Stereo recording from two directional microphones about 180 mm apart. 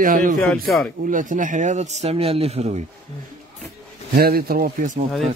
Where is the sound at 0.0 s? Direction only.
50° right (ahead or behind).